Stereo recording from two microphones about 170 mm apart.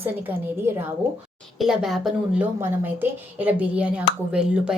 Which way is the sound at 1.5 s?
Centre (ahead or behind).